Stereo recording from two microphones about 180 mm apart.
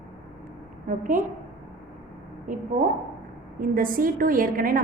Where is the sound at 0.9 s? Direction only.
45° right (ahead or behind).